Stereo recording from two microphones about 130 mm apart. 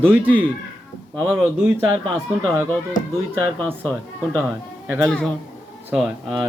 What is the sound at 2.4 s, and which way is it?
Speech, 15° right (ahead or behind).